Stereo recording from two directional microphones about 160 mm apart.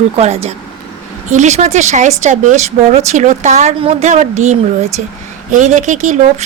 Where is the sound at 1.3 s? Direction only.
45° right (ahead or behind).